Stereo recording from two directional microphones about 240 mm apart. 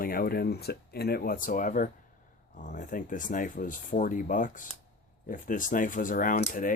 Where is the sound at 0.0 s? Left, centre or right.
Left.